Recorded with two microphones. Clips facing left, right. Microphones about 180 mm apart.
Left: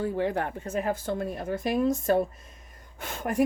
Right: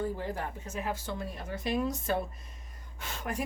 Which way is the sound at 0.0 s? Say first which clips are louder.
Left 6 dB; 70° left (ahead or behind).